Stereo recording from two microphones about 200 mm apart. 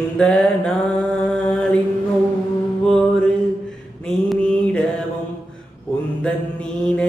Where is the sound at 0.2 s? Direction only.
5° left (ahead or behind).